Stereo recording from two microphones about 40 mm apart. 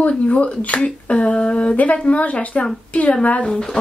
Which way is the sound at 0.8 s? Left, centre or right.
Left.